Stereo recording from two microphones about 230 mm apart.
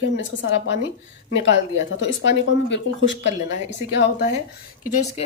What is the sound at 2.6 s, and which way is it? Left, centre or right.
A woman's voice, left.